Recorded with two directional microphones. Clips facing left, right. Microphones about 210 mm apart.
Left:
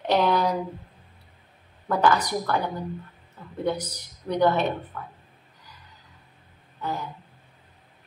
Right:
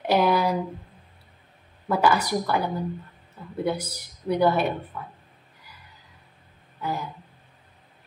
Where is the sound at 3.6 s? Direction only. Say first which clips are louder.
Even; 10° right (ahead or behind).